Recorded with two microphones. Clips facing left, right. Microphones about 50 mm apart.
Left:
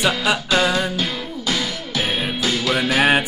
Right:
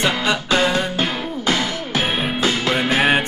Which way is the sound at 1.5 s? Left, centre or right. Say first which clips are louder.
Right 3 dB; right.